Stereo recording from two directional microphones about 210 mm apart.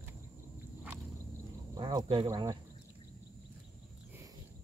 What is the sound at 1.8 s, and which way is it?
Speech, 20° right (ahead or behind).